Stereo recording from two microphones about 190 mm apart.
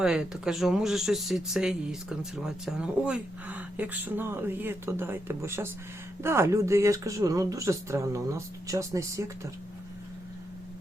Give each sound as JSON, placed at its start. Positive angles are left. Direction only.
{"t": 0.0, "sound": "speech", "side_deg": -5}